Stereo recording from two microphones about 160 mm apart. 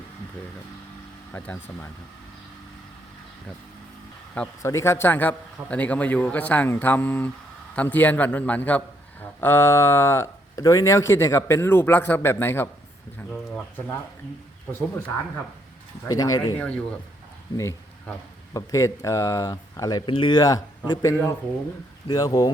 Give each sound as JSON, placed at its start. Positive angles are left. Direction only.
{"t": 1.3, "sound": "speech", "side_deg": 10}
{"t": 4.6, "sound": "speech", "side_deg": 15}
{"t": 13.3, "sound": "speech", "side_deg": 0}
{"t": 16.0, "sound": "speech", "side_deg": 25}
{"t": 16.6, "sound": "speech", "side_deg": 10}
{"t": 17.6, "sound": "a sound", "side_deg": 15}
{"t": 18.5, "sound": "speech", "side_deg": 20}